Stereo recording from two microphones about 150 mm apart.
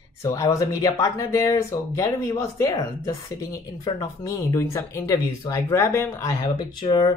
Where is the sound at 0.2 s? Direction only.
20° left (ahead or behind).